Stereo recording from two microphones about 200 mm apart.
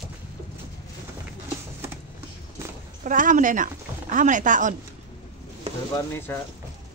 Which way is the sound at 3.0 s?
40° right (ahead or behind).